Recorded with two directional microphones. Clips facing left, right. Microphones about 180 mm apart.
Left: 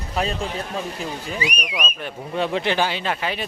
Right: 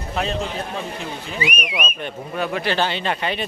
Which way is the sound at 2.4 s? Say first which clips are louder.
Left 1 dB; 25° left (ahead or behind).